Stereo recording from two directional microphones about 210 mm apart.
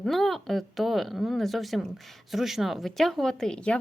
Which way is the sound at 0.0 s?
Centre (ahead or behind).